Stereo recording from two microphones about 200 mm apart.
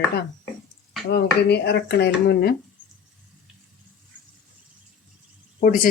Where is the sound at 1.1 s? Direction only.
55° left (ahead or behind).